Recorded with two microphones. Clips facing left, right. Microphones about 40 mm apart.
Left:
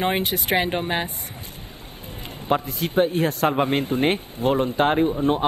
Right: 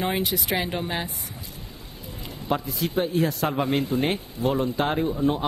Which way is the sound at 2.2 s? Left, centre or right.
Left.